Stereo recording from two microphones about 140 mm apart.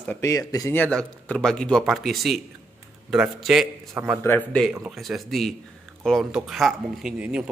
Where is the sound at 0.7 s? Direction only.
10° left (ahead or behind).